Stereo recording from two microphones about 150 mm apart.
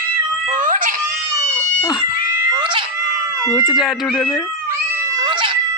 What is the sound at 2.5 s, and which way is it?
Cat, 30° right (ahead or behind).